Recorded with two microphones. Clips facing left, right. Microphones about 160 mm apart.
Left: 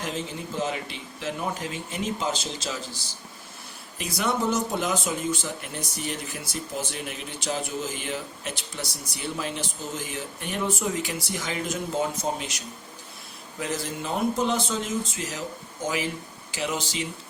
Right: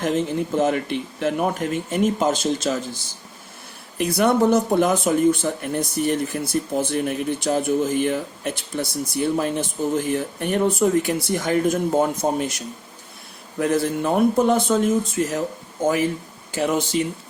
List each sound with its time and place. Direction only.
0.0 s speech: 55° right (ahead or behind)